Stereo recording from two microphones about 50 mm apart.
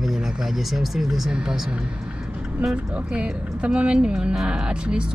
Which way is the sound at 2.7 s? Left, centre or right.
Right.